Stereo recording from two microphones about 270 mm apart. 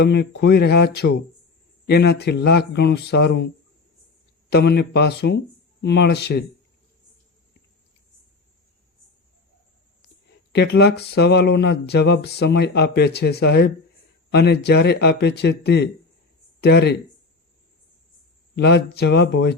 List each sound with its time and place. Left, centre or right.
0.0 s speech: left
4.4 s speech: left
10.5 s speech: left
18.5 s speech: left